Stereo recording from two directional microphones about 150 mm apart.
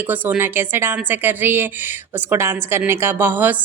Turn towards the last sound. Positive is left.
turn(degrees=-15)  # may be behind; listen again after turning